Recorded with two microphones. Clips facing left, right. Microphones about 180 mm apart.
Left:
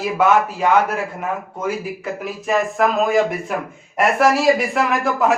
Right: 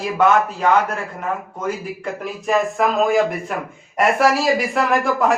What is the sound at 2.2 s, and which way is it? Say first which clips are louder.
A man's voice: right 1 dB; centre (ahead or behind).